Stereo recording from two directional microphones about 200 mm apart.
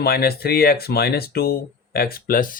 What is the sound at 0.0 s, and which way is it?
Speech, 50° left (ahead or behind).